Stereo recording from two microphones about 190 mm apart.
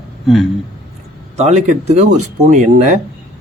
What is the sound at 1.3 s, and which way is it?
Speech, 35° right (ahead or behind).